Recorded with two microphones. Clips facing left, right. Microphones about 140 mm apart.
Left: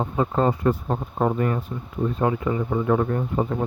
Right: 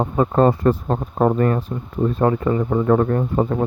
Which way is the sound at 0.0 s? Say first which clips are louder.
Right 5 dB; 60° right (ahead or behind).